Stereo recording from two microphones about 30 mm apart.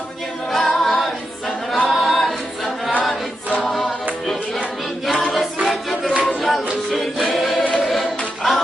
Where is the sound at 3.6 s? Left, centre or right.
Centre.